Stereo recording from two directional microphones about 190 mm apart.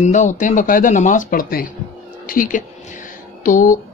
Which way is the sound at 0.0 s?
40° left (ahead or behind).